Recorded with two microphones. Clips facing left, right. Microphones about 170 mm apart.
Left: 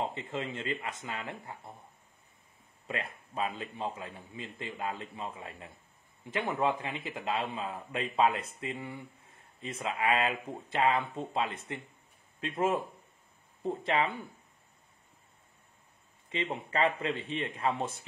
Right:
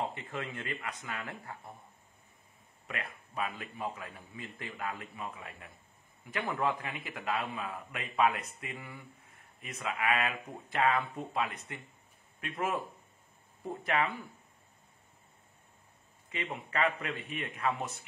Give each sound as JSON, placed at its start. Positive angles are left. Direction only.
{"t": 0.1, "sound": "a man's voice", "side_deg": 20}
{"t": 2.9, "sound": "a man's voice", "side_deg": 25}
{"t": 16.3, "sound": "a man's voice", "side_deg": 25}